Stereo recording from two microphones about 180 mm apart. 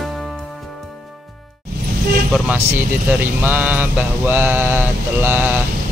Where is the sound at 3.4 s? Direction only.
10° right (ahead or behind).